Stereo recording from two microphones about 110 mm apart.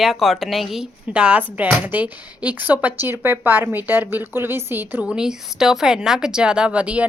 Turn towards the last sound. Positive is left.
turn(degrees=-10)  # may be behind; listen again after turning